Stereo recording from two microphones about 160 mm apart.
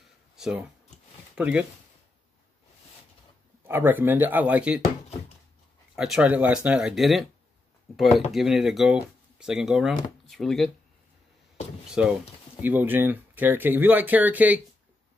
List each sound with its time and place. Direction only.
0.4 s speech: 5° right (ahead or behind)
3.6 s speech: 15° right (ahead or behind)
5.9 s speech: 5° right (ahead or behind)
11.9 s speech: 5° right (ahead or behind)